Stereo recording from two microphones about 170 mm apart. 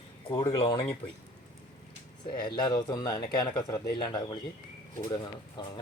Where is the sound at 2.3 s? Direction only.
25° left (ahead or behind).